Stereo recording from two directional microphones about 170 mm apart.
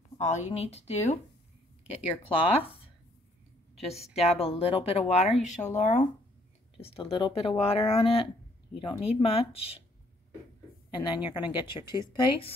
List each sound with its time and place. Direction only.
0.2 s speech: 40° left (ahead or behind)
4.2 s speech: 35° left (ahead or behind)
6.8 s speech: 30° left (ahead or behind)
10.9 s speech: 30° left (ahead or behind)